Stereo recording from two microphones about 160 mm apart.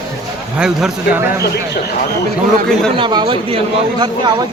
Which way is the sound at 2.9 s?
30° right (ahead or behind).